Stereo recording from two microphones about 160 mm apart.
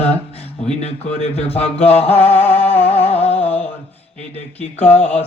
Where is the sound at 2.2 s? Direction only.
10° left (ahead or behind).